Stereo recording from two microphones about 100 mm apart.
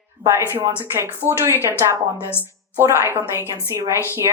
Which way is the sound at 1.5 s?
30° left (ahead or behind).